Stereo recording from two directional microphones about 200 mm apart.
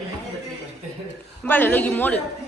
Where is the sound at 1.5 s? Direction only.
10° left (ahead or behind).